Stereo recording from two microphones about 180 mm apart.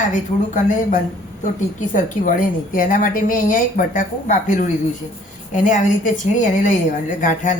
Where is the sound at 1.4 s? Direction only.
45° left (ahead or behind).